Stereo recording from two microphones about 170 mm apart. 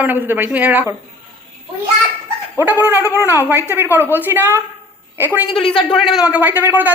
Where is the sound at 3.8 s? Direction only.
10° right (ahead or behind).